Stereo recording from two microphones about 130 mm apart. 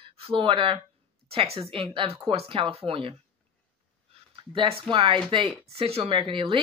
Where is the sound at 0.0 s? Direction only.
45° right (ahead or behind).